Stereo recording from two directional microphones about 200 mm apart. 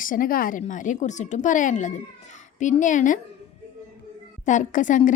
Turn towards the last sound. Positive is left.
turn(degrees=40)  # may be behind; listen again after turning